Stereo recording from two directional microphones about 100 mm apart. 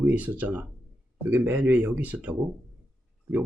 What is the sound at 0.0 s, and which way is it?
Speech, 15° right (ahead or behind).